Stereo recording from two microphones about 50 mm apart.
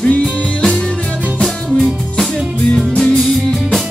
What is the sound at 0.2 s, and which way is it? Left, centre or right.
Music, centre.